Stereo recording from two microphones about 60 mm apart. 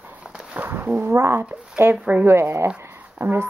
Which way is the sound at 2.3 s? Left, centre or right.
Right.